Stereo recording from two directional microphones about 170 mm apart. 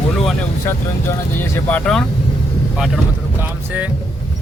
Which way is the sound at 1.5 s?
10° left (ahead or behind).